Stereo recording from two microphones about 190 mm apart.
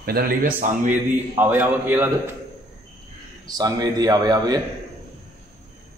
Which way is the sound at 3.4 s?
20° right (ahead or behind).